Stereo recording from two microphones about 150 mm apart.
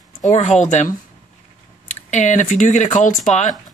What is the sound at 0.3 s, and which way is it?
Speech, 50° left (ahead or behind).